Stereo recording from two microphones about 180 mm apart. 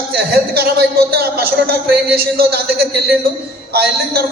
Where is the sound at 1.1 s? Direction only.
60° right (ahead or behind).